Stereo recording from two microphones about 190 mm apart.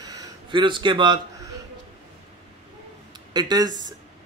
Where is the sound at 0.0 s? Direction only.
20° right (ahead or behind).